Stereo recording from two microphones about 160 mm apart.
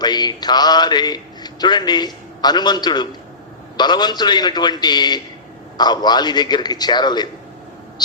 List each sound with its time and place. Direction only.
0.0 s a man's voice: 25° left (ahead or behind)